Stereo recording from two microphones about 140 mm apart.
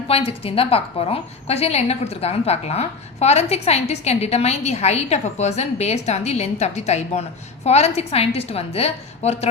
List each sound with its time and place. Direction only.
0.1 s a woman's voice: 45° left (ahead or behind)